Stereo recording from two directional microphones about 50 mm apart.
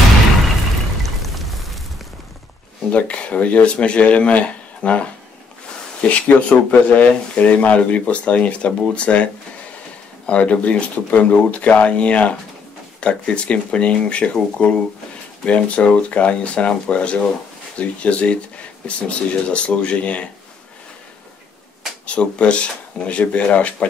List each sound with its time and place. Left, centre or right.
1.0 s a sound: centre
2.9 s speech: left
22.0 s speech: left